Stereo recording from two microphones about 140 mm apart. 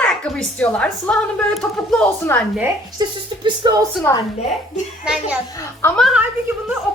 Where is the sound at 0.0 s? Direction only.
5° left (ahead or behind).